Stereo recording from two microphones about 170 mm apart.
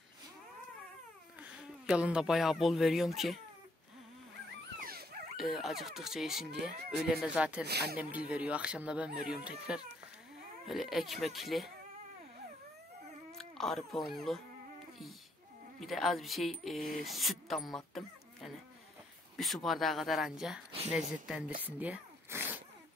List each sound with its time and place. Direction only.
1.4 s speech: 5° right (ahead or behind)
4.7 s dog: 60° right (ahead or behind)
5.3 s speech: centre (ahead or behind)
7.6 s speech: 75° right (ahead or behind)
8.0 s speech: 10° right (ahead or behind)
13.4 s speech: centre (ahead or behind)
15.8 s speech: centre (ahead or behind)
21.6 s a sound: 10° right (ahead or behind)